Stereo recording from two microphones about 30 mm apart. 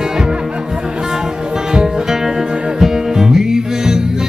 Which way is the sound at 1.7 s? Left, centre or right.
Centre.